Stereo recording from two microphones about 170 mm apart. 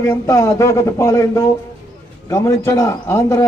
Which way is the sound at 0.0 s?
20° left (ahead or behind).